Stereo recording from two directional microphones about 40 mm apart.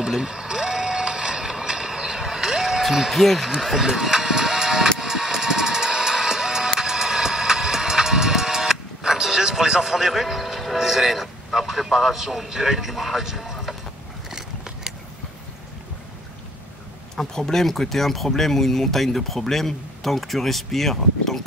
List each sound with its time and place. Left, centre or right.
0.0 s vehicle: centre
2.9 s speech: centre
3.2 s speech: centre
3.5 s music: centre
14.3 s a sound: centre
17.2 s speech: centre